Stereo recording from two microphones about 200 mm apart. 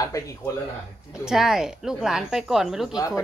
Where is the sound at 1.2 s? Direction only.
5° right (ahead or behind).